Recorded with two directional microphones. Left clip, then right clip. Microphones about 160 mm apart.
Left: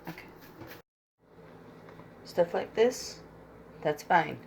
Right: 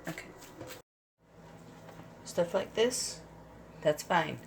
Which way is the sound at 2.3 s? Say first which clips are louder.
Left 3 dB; centre (ahead or behind).